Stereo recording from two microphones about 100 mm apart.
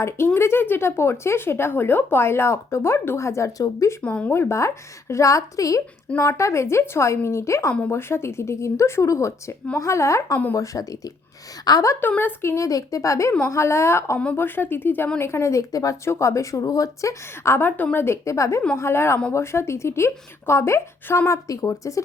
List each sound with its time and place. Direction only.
0.3 s speech: 25° left (ahead or behind)
4.0 s speech: 10° left (ahead or behind)
4.3 s a woman's voice: 25° left (ahead or behind)
11.9 s a woman's voice: 20° left (ahead or behind)